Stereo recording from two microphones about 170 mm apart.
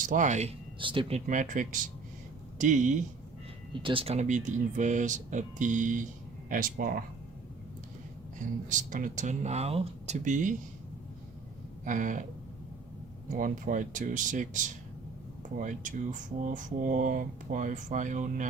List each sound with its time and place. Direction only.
0.0 s speech: 50° right (ahead or behind); by 1.2 s 30° right (ahead or behind)
1.3 s speech: 50° right (ahead or behind)
3.7 s speech: 30° right (ahead or behind); by 7.0 s 55° right (ahead or behind)
8.4 s speech: 50° right (ahead or behind)
11.9 s speech: 50° right (ahead or behind)
13.3 s speech: 50° right (ahead or behind)